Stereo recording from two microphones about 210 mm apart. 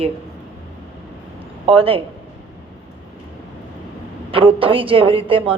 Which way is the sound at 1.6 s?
25° right (ahead or behind).